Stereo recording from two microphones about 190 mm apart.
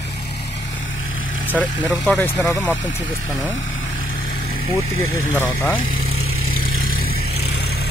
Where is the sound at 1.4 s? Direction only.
10° left (ahead or behind).